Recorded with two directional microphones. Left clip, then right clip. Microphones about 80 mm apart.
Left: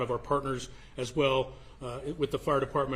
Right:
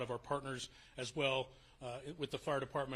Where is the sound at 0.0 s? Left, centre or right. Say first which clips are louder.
Left 11 dB; right.